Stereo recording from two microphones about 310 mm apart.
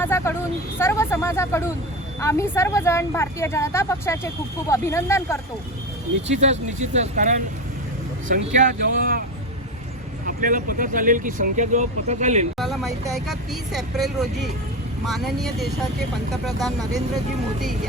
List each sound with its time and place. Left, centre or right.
0.0 s vehicle: centre
0.8 s speech: centre
6.2 s speech: right
10.2 s speech: right
12.5 s speech: centre